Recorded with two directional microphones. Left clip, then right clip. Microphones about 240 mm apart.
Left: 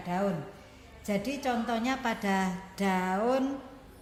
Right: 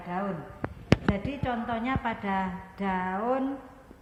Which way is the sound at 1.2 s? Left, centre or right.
Left.